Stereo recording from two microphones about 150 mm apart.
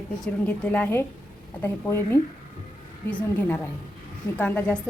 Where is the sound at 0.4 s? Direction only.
5° left (ahead or behind).